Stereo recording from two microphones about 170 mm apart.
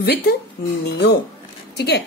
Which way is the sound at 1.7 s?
75° left (ahead or behind).